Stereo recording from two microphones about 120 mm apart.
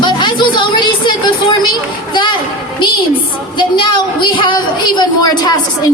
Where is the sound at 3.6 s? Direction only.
40° left (ahead or behind).